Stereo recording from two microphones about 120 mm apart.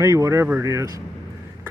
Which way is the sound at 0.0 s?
30° right (ahead or behind).